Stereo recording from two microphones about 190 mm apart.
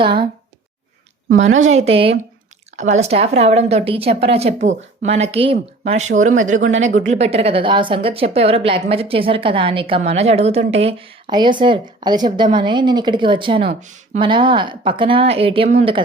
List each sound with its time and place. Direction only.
0.0 s speech: 25° right (ahead or behind)
1.5 s a woman's voice: 35° right (ahead or behind)